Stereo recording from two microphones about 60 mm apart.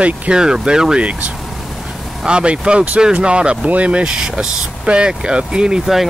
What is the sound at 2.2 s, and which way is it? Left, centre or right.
Speech, centre.